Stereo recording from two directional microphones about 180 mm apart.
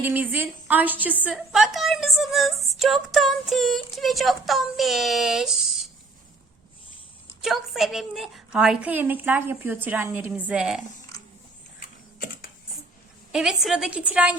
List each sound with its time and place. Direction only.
0.0 s a woman's voice: 10° right (ahead or behind)
7.4 s a woman's voice: centre (ahead or behind)
11.1 s a sound: 20° left (ahead or behind)
13.3 s speech: centre (ahead or behind)